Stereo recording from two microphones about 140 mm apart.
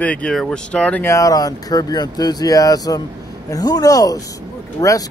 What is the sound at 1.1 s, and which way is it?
Speech, 25° left (ahead or behind).